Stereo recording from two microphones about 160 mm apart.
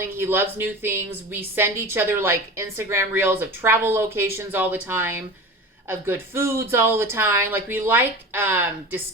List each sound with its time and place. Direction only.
0.0 s a woman's voice: 15° right (ahead or behind)